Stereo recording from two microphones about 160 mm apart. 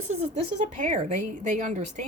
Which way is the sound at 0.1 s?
45° right (ahead or behind).